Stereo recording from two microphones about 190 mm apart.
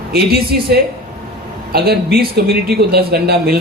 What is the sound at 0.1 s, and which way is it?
Speech, 55° right (ahead or behind).